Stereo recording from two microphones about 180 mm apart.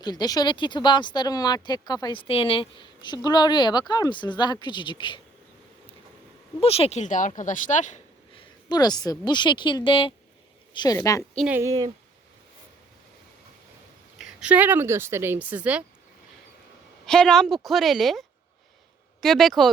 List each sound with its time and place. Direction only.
0.0 s speech: 20° left (ahead or behind)
6.6 s speech: 35° left (ahead or behind)
8.4 s speech: 20° left (ahead or behind)
11.2 s a woman's voice: centre (ahead or behind)
11.5 s speech: 20° right (ahead or behind)
14.2 s speech: 5° right (ahead or behind)
17.1 s a woman's voice: centre (ahead or behind)